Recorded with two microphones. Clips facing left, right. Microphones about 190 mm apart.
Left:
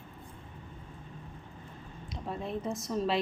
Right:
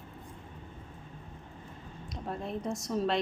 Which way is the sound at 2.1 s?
Centre (ahead or behind).